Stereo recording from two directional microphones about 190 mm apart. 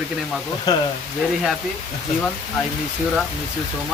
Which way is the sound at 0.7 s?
20° left (ahead or behind).